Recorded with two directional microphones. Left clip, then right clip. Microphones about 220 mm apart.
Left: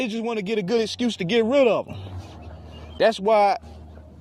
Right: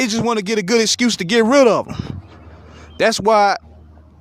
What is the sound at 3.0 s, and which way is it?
Speech, 35° right (ahead or behind).